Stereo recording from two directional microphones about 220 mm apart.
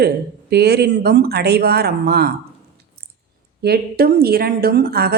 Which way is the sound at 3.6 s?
45° right (ahead or behind).